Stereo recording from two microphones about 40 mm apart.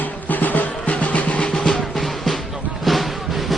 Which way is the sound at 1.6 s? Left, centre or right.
Centre.